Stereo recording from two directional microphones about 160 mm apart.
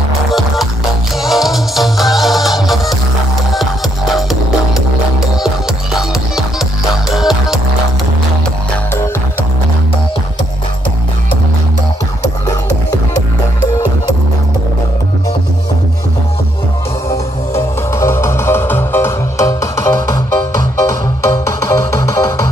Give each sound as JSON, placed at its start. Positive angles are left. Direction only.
{"t": 0.3, "sound": "music", "side_deg": 0}
{"t": 4.1, "sound": "music", "side_deg": 0}
{"t": 7.1, "sound": "music", "side_deg": 0}
{"t": 17.1, "sound": "music", "side_deg": 15}